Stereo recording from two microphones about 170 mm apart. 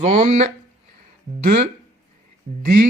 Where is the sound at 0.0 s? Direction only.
45° right (ahead or behind).